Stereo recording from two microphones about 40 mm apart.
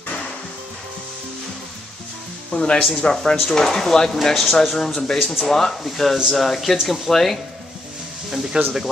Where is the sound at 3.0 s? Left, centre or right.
Centre.